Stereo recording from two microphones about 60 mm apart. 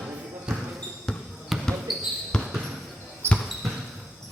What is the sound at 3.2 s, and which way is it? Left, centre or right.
Basketball bounce, right.